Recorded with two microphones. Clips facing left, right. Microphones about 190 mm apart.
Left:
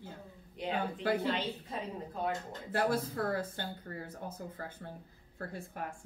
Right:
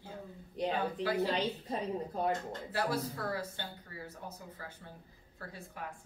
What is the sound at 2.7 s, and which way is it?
Speech, 55° left (ahead or behind).